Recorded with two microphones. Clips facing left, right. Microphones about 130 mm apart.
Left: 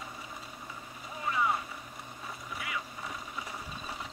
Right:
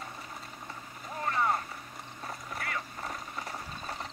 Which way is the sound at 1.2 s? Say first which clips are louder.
Right 1 dB; 50° right (ahead or behind).